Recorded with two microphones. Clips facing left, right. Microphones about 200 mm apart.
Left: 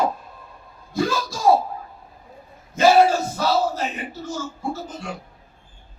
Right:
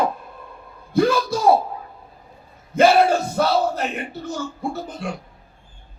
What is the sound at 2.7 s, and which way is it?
Bellow, 60° right (ahead or behind).